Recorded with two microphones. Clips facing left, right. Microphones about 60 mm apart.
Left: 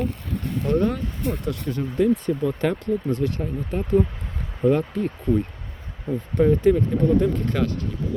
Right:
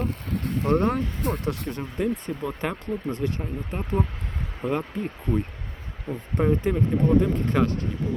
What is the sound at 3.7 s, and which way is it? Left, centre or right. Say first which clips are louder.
Speech: left 7 dB; centre.